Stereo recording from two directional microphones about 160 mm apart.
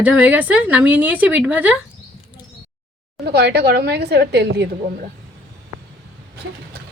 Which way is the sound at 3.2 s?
90° right.